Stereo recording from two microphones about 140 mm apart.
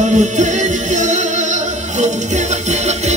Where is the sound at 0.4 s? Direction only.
60° right (ahead or behind).